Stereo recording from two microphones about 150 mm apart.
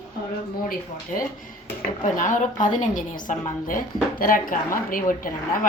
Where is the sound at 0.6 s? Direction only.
70° left (ahead or behind).